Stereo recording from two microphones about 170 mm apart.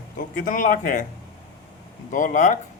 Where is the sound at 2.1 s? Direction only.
50° left (ahead or behind).